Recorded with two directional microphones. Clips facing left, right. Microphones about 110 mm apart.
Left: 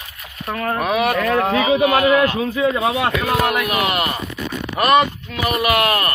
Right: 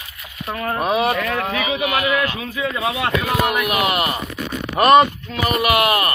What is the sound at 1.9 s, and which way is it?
Speech, 40° left (ahead or behind).